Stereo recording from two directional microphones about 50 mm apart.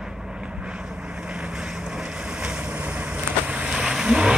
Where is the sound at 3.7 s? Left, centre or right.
Centre.